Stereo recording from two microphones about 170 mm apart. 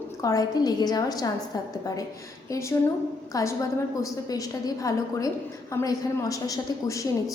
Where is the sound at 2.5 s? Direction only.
15° left (ahead or behind).